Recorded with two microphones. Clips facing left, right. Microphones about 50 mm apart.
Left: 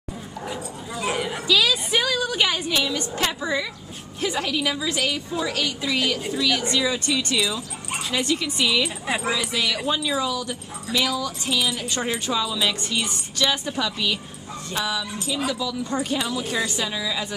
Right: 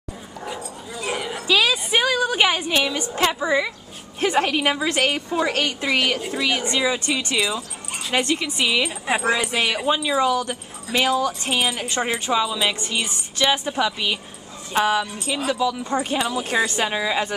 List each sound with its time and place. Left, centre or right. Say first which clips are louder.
0.5 s dog: right 1 dB; centre
1.5 s dog: right 2 dB; right
2.0 s a woman's voice: right 4 dB; right
3.2 s a woman's voice: right 6 dB; centre
4.2 s a woman's voice: right 5 dB; right
6.3 s speech: even; right
8.1 s speech: right 3 dB; right
8.4 s speech: right 1 dB; right
9.0 s a woman's voice: right 3 dB; centre
9.3 s speech: right 3 dB; right
9.8 s speech: right 4 dB; right
10.2 s speech: right 6 dB; right
11.9 s speech: right 3 dB; right
14.7 s speech: right 7 dB; right